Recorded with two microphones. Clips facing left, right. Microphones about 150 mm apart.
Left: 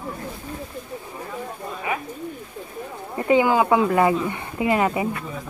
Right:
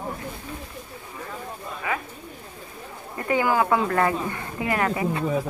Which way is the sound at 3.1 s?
20° left (ahead or behind).